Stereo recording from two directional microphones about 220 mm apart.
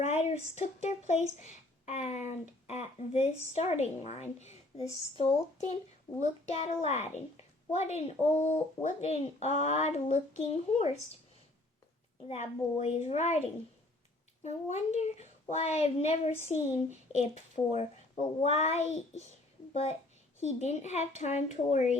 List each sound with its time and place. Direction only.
0.0 s a sound: 30° left (ahead or behind)
0.5 s a woman's voice: 30° left (ahead or behind)
12.3 s a woman's voice: 30° left (ahead or behind)